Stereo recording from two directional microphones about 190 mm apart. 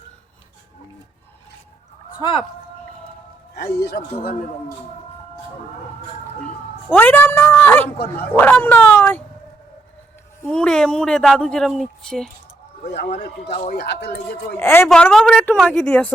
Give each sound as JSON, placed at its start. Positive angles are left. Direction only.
{"t": 3.5, "sound": "speech", "side_deg": 60}
{"t": 6.9, "sound": "a woman's voice", "side_deg": 10}
{"t": 10.4, "sound": "speech", "side_deg": 5}
{"t": 13.5, "sound": "speech", "side_deg": 30}
{"t": 13.7, "sound": "speech", "side_deg": 60}
{"t": 14.6, "sound": "a woman's voice", "side_deg": 10}